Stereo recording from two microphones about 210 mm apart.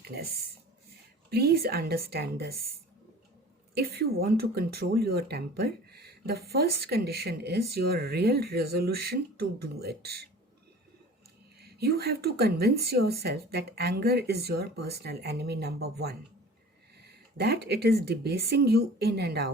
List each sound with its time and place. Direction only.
0.0 s a sound: 50° right (ahead or behind)
1.3 s speech: 50° right (ahead or behind)
3.8 s speech: 45° right (ahead or behind)
11.6 s speech: 50° right (ahead or behind)